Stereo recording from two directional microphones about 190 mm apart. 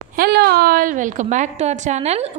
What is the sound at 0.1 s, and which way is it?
A woman's voice, 55° right (ahead or behind).